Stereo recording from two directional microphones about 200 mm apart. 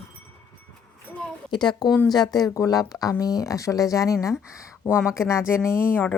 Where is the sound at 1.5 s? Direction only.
20° left (ahead or behind).